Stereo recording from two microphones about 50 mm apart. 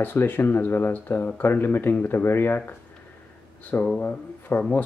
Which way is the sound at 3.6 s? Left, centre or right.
Left.